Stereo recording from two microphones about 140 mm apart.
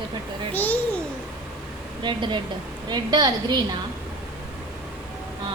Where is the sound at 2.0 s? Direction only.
35° right (ahead or behind).